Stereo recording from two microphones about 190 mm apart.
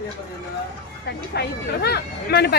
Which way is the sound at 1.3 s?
60° left (ahead or behind).